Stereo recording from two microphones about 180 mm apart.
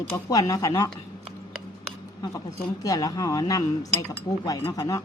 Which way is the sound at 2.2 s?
20° left (ahead or behind).